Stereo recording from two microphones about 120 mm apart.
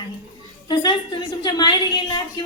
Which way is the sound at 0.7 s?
40° left (ahead or behind).